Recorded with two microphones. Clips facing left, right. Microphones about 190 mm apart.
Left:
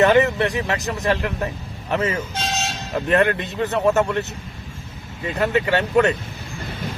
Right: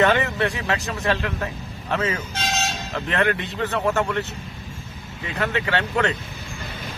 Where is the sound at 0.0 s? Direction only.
20° left (ahead or behind).